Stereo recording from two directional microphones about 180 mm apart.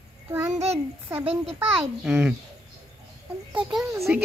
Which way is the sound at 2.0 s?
5° right (ahead or behind).